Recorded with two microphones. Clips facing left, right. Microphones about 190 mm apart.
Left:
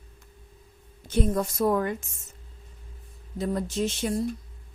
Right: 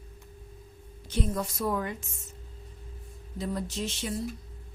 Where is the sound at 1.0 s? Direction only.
45° left (ahead or behind).